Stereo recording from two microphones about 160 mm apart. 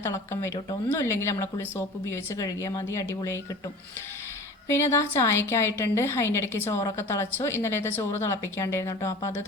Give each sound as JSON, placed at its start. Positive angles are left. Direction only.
{"t": 0.0, "sound": "a woman's voice", "side_deg": 15}
{"t": 4.7, "sound": "a woman's voice", "side_deg": 15}